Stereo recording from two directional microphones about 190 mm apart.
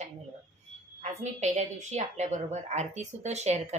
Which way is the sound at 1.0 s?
40° right (ahead or behind).